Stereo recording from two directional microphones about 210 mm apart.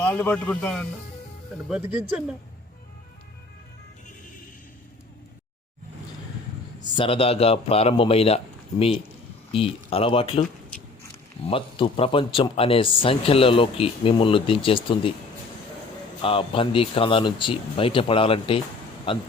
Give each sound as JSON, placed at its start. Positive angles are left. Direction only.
{"t": 0.0, "sound": "a man's voice", "side_deg": 10}
{"t": 1.7, "sound": "speech", "side_deg": -5}
{"t": 6.9, "sound": "speech", "side_deg": 25}
{"t": 9.5, "sound": "speech", "side_deg": 25}
{"t": 11.4, "sound": "speech", "side_deg": 25}
{"t": 16.2, "sound": "speech", "side_deg": 25}